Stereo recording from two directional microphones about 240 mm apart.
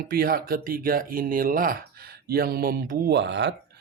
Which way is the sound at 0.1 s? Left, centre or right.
Right.